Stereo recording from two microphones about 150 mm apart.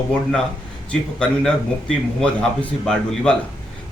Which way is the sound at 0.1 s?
5° left (ahead or behind).